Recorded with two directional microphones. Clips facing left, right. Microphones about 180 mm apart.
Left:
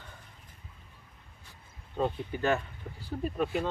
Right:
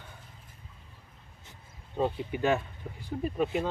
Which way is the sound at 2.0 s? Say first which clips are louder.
Right 2 dB; 10° right (ahead or behind).